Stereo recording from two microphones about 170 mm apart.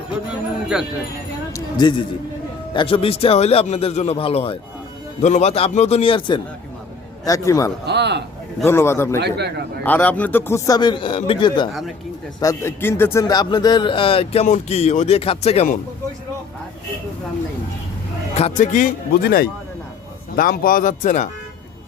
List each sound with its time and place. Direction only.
0.3 s jingle bell: 5° right (ahead or behind)
1.5 s a man's voice: 25° left (ahead or behind)
7.9 s a man's voice: 90° right
8.6 s speech: 15° left (ahead or behind)
9.2 s a man's voice: 70° right (ahead or behind)
9.8 s speech: 10° left (ahead or behind); by 11.7 s 25° left (ahead or behind)
12.4 s speech: 15° left (ahead or behind); by 15.8 s 45° left (ahead or behind)
18.3 s speech: 40° left (ahead or behind)